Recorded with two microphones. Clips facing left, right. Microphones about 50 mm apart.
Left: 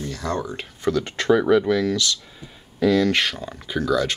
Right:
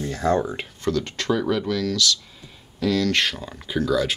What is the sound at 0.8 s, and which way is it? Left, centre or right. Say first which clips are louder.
Speech: left 3 dB; centre.